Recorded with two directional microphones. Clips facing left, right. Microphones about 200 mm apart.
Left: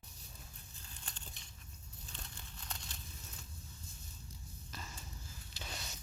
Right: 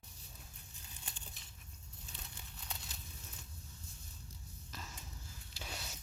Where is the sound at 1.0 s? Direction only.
5° right (ahead or behind).